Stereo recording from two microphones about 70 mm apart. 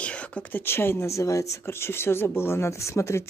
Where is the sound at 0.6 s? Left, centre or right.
Left.